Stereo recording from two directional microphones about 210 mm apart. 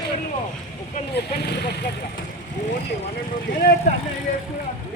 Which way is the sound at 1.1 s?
50° left (ahead or behind).